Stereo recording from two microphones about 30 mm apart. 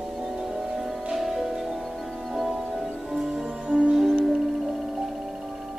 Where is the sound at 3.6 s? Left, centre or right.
Right.